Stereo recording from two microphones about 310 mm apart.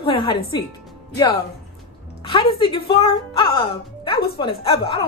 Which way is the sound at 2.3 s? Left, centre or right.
Centre.